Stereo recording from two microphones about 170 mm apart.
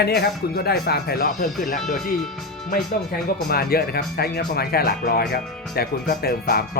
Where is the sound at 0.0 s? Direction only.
65° left (ahead or behind).